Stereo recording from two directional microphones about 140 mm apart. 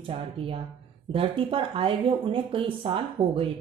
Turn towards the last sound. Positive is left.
turn(degrees=-40)  # may be behind; listen again after turning